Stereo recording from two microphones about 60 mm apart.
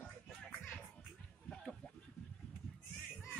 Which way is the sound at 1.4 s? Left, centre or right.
Centre.